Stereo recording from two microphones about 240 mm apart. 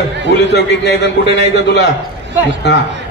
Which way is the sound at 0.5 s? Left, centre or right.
Left.